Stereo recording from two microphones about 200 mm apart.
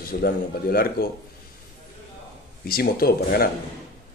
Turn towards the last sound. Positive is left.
turn(degrees=50)  # may be behind; listen again after turning